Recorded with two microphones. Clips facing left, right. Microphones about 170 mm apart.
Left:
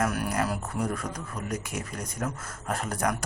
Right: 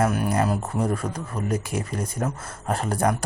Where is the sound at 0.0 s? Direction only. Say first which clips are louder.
Right 5 dB; 25° right (ahead or behind).